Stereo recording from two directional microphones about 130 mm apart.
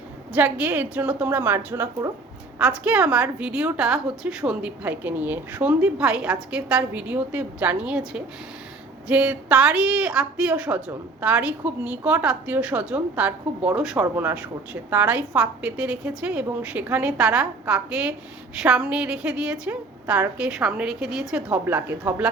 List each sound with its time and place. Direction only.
0.3 s a woman's voice: 10° right (ahead or behind)
2.6 s a woman's voice: 5° right (ahead or behind)
21.5 s a woman's voice: 15° right (ahead or behind)